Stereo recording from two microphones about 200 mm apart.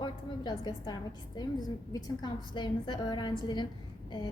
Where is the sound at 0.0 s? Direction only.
20° left (ahead or behind).